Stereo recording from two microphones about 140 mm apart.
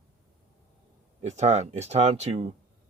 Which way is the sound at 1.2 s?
55° right (ahead or behind).